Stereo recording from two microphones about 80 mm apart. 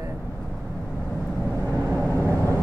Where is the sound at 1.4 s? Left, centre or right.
Left.